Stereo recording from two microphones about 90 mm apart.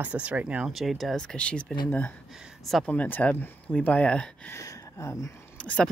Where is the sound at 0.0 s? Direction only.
15° right (ahead or behind).